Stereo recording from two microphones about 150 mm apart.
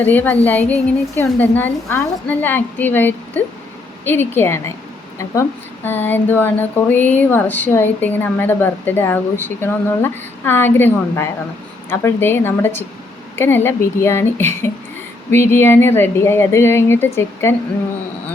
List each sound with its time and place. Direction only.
0.0 s speech: 10° left (ahead or behind)